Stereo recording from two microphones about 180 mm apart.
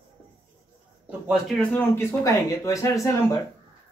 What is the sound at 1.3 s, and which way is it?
Speech, centre (ahead or behind).